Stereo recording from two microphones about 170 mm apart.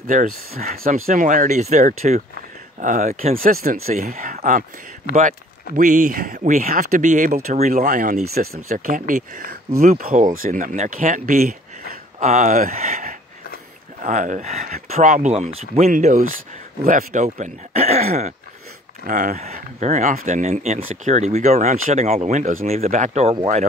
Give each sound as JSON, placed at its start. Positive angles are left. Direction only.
{"t": 0.0, "sound": "speech", "side_deg": -50}
{"t": 0.7, "sound": "speech", "side_deg": -60}
{"t": 3.3, "sound": "speech", "side_deg": -60}
{"t": 3.8, "sound": "speech", "side_deg": -45}
{"t": 5.8, "sound": "speech", "side_deg": -50}
{"t": 7.8, "sound": "speech", "side_deg": -55}
{"t": 11.9, "sound": "a sound", "side_deg": -50}
{"t": 14.0, "sound": "speech", "side_deg": -50}